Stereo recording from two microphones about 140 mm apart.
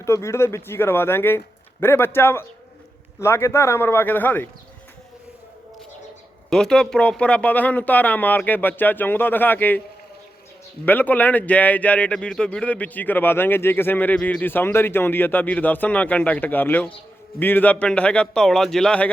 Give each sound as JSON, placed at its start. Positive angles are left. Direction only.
{"t": 0.0, "sound": "speech", "side_deg": 20}
{"t": 6.5, "sound": "speech", "side_deg": 5}
{"t": 10.8, "sound": "speech", "side_deg": 10}